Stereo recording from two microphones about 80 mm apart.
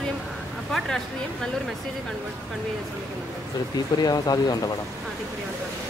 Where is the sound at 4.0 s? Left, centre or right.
Left.